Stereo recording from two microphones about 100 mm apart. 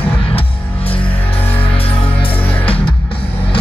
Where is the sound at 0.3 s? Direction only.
70° left (ahead or behind).